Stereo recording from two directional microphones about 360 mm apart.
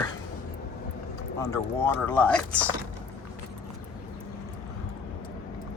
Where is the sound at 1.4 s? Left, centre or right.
Centre.